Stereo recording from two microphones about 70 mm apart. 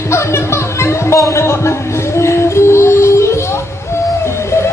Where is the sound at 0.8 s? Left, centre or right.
Left.